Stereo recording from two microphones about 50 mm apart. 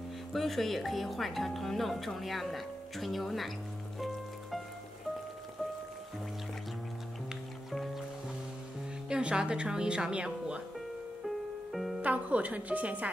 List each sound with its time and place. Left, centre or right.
0.3 s speech: centre
4.0 s music: centre
7.7 s music: centre
9.1 s a woman's voice: centre
11.2 s music: centre
12.0 s speech: right